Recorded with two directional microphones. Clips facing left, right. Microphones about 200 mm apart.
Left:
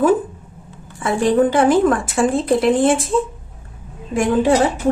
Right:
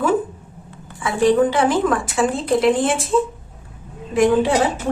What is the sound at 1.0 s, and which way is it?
A woman's voice, 50° left (ahead or behind).